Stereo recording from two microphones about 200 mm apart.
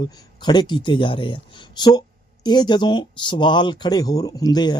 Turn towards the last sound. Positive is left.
turn(degrees=20)  # may be behind; listen again after turning